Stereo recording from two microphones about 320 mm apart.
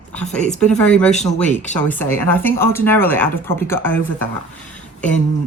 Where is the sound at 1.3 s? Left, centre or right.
Centre.